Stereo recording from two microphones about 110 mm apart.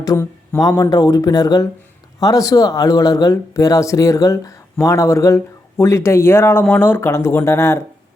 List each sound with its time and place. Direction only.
0.0 s speech: 30° left (ahead or behind)